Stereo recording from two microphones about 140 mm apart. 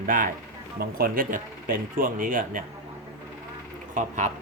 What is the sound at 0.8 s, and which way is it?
Speech, 90° right.